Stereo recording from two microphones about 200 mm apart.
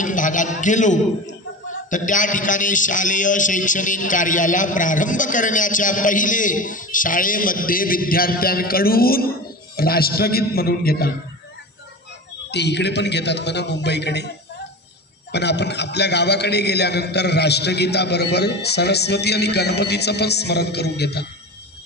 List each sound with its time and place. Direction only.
0.0 s a man's voice: 40° left (ahead or behind)
12.4 s a man's voice: 60° left (ahead or behind)
15.3 s a man's voice: 55° left (ahead or behind)